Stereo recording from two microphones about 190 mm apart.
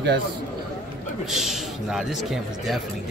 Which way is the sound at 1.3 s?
Centre (ahead or behind).